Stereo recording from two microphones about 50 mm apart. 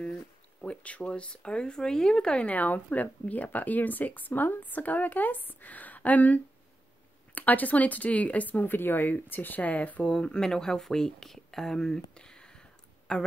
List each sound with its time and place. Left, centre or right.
0.6 s speech: left
2.4 s speech: left
10.2 s speech: centre